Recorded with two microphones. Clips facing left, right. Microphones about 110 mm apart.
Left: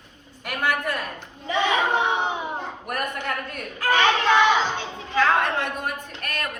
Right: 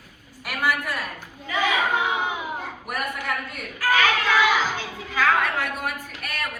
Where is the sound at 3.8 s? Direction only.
25° left (ahead or behind).